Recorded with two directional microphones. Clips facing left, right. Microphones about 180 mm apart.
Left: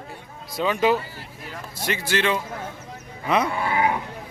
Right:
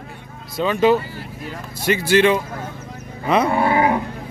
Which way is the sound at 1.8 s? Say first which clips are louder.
Right 8 dB; 10° right (ahead or behind).